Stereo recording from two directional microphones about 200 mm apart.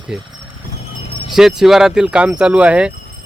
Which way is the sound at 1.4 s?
Centre (ahead or behind).